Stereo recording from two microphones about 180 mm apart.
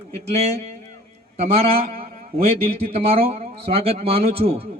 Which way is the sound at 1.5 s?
35° right (ahead or behind).